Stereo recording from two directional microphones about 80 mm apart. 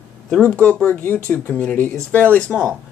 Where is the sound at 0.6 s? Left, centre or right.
Left.